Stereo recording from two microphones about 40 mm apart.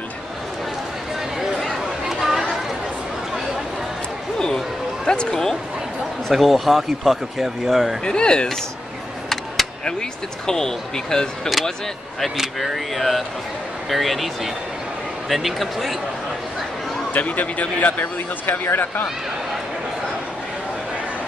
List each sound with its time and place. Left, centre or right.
2.0 s chatter: centre
5.0 s speech: left
6.3 s speech: centre
8.0 s speech: left
9.8 s speech: centre
12.5 s speech: centre
17.1 s speech: left
18.0 s speech: left